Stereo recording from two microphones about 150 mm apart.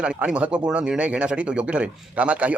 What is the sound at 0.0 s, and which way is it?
A man's voice, 5° right (ahead or behind).